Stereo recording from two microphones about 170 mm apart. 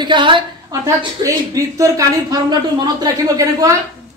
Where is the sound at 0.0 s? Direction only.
30° right (ahead or behind).